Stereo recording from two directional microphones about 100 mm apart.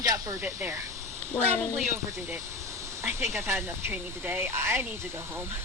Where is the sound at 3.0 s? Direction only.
25° right (ahead or behind).